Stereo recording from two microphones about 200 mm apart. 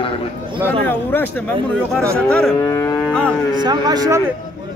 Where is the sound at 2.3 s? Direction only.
5° left (ahead or behind).